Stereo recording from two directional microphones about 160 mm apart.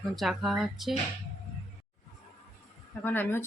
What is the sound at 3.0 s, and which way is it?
Speech, 15° left (ahead or behind).